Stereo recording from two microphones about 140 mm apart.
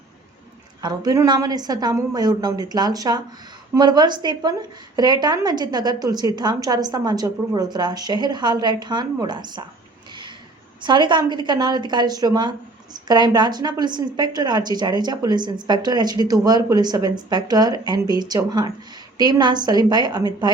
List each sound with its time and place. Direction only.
0.8 s a woman's voice: 30° right (ahead or behind)
10.8 s a woman's voice: 35° right (ahead or behind)